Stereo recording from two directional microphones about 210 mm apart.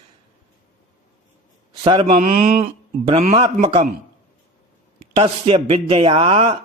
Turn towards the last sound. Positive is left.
turn(degrees=-25)  # may be behind; listen again after turning